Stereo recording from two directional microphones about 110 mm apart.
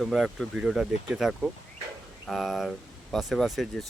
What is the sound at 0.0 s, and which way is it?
Speech, centre (ahead or behind).